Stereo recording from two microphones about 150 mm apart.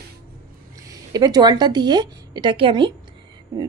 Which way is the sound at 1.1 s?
25° right (ahead or behind).